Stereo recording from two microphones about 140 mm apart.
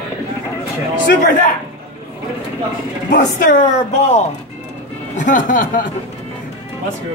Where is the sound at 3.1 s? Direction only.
75° left (ahead or behind).